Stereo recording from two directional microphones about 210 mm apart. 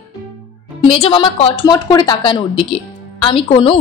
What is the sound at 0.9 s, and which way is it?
A woman's voice, 25° left (ahead or behind).